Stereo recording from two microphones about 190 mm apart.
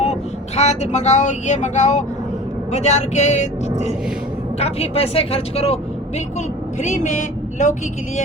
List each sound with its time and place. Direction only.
0.0 s speech: 35° left (ahead or behind)